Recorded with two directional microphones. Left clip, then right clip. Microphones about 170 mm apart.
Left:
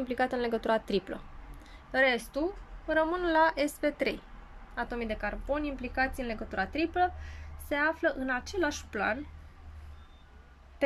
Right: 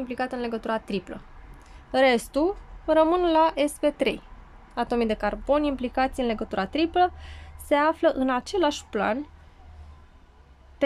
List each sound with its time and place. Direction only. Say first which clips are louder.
0.0 s a woman's voice: right 1 dB; 5° right (ahead or behind)
1.9 s speech: right 6 dB; 20° right (ahead or behind)